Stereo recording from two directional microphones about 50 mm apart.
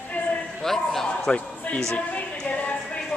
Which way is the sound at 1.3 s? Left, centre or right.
Left.